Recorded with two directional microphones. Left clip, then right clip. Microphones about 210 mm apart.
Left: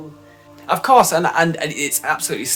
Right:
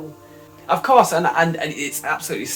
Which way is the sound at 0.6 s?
45° left (ahead or behind).